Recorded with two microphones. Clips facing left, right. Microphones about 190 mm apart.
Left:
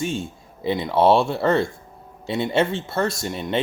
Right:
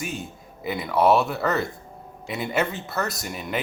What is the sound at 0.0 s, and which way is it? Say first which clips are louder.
Speech: left 6 dB; 30° left (ahead or behind).